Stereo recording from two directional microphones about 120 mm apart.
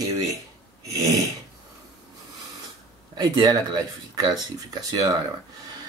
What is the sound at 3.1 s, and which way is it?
Speech, 35° right (ahead or behind).